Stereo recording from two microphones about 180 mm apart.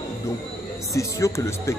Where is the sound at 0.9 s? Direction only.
15° left (ahead or behind).